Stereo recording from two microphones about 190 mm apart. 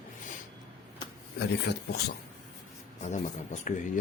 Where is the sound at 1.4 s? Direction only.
60° left (ahead or behind).